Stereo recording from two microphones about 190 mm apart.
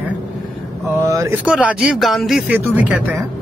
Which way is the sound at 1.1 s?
15° right (ahead or behind).